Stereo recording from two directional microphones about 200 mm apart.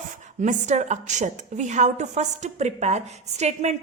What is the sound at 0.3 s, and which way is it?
A woman's voice, 35° right (ahead or behind).